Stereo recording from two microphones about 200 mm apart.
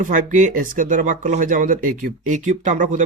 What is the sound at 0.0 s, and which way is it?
Speech, 40° right (ahead or behind).